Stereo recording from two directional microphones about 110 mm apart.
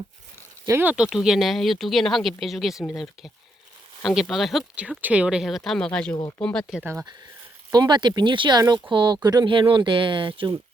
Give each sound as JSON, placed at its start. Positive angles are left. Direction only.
{"t": 0.7, "sound": "speech", "side_deg": -20}
{"t": 0.9, "sound": "speech", "side_deg": -5}
{"t": 4.0, "sound": "speech", "side_deg": 0}
{"t": 7.7, "sound": "speech", "side_deg": -40}